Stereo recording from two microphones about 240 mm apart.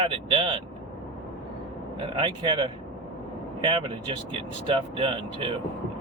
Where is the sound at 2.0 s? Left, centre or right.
Right.